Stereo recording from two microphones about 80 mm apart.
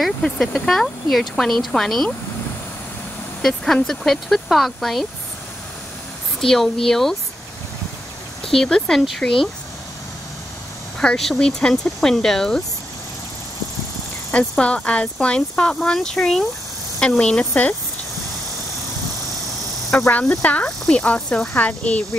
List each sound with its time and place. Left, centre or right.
0.0 s speech: centre
3.4 s speech: centre
6.4 s speech: centre
8.5 s speech: centre
11.0 s speech: centre
14.3 s speech: centre
20.1 s speech: centre